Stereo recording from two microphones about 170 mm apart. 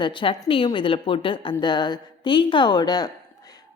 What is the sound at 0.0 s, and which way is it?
A woman's voice, 30° left (ahead or behind).